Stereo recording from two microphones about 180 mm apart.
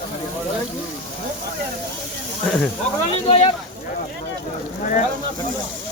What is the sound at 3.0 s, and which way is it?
Speech, 30° left (ahead or behind).